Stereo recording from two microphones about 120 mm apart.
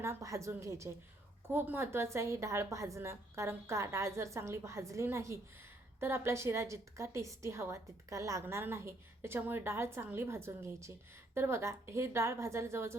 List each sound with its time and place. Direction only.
0.0 s a woman's voice: 25° right (ahead or behind)